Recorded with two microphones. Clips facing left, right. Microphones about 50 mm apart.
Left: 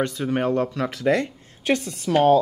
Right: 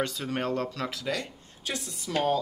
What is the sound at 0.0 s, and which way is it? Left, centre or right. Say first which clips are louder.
Speech: left 7 dB; left.